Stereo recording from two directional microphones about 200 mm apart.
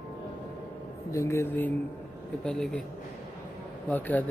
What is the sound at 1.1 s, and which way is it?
Speech, 15° left (ahead or behind).